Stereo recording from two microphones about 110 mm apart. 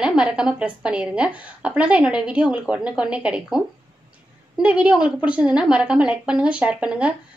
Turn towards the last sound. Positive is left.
turn(degrees=-10)  # may be behind; listen again after turning